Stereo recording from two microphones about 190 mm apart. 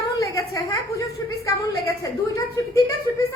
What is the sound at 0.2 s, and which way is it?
Speech, 15° left (ahead or behind).